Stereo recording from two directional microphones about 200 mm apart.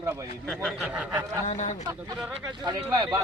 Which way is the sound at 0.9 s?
10° right (ahead or behind).